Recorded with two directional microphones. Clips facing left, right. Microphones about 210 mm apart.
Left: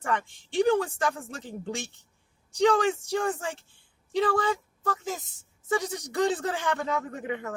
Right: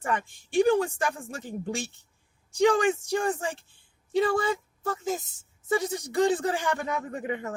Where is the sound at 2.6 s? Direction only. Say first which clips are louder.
Right 1 dB; 15° right (ahead or behind).